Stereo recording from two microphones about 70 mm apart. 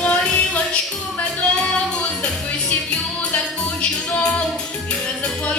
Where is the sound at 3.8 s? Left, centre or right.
Centre.